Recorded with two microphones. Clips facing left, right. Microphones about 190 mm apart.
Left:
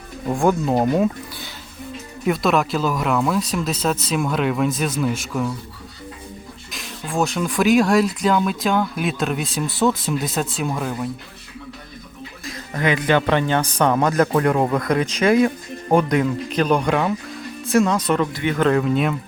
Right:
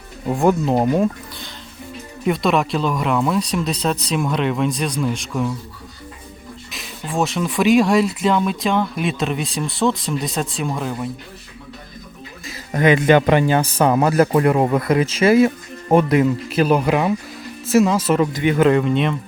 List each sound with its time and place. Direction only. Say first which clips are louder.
0.3 s speech: right 2 dB; centre (ahead or behind)
6.7 s speech: right 1 dB; centre (ahead or behind)
12.7 s speech: right 5 dB; 20° right (ahead or behind); by 18.3 s 5° right (ahead or behind)
18.3 s speech: right 4 dB; 15° right (ahead or behind)
18.7 s speech: right 1 dB; centre (ahead or behind)